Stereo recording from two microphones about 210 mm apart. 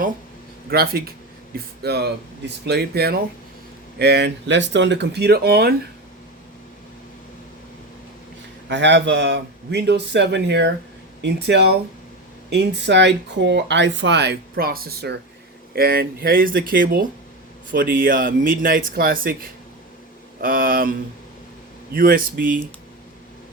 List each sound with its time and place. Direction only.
0.7 s speech: 45° right (ahead or behind)
8.7 s speech: 55° right (ahead or behind)
21.9 s speech: 45° right (ahead or behind)